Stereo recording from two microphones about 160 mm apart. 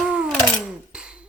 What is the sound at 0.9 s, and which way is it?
Dishes, 5° right (ahead or behind).